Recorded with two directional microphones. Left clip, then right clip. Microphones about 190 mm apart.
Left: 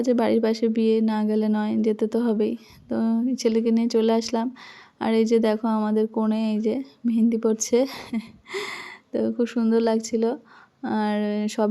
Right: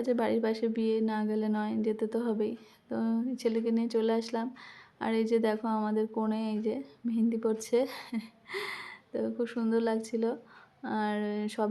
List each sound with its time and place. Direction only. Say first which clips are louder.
0.0 s a woman's voice: left 8 dB; 30° left (ahead or behind)